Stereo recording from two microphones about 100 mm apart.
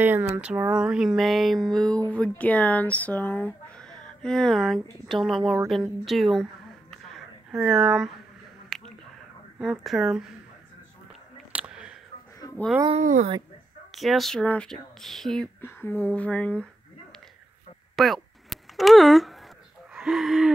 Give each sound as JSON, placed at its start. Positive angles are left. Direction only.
{"t": 0.0, "sound": "speech", "side_deg": -20}
{"t": 6.9, "sound": "a sound", "side_deg": 0}
{"t": 9.6, "sound": "speech", "side_deg": 0}
{"t": 11.5, "sound": "a sound", "side_deg": -10}
{"t": 13.9, "sound": "speech", "side_deg": 0}
{"t": 14.4, "sound": "speech", "side_deg": 15}
{"t": 14.7, "sound": "speech", "side_deg": 5}
{"t": 15.6, "sound": "speech", "side_deg": 20}
{"t": 17.9, "sound": "a sound", "side_deg": 0}